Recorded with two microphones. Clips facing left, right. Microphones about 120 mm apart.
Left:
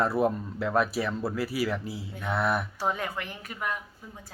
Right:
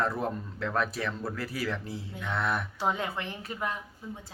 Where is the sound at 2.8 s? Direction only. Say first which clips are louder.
Even; 20° right (ahead or behind).